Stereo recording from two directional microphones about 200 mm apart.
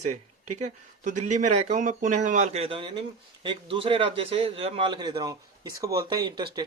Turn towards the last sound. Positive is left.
turn(degrees=-20)  # may be behind; listen again after turning